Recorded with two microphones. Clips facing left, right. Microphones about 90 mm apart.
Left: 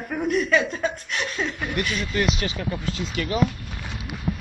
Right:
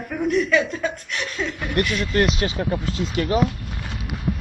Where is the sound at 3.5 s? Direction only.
5° right (ahead or behind).